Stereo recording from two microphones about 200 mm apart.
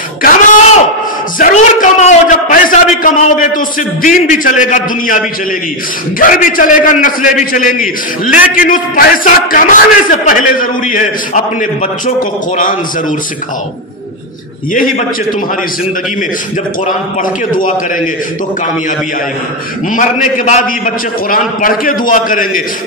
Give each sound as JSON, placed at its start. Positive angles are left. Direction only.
{"t": 0.2, "sound": "a sound", "side_deg": 40}
{"t": 4.6, "sound": "a man's voice", "side_deg": 40}
{"t": 17.2, "sound": "a man's voice", "side_deg": 40}
{"t": 19.9, "sound": "a man's voice", "side_deg": 40}